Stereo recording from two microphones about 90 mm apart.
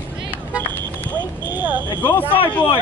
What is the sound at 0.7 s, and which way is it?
Vehicle, 20° left (ahead or behind).